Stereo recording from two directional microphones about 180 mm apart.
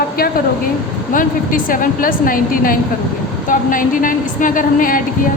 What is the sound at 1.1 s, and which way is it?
A woman's voice, 50° left (ahead or behind).